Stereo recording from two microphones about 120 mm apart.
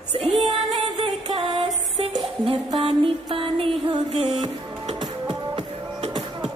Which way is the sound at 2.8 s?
50° right (ahead or behind).